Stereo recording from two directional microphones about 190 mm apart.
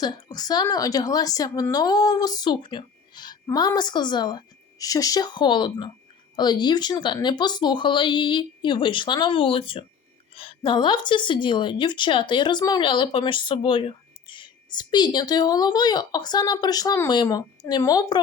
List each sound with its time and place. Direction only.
0.0 s a woman's voice: 20° left (ahead or behind)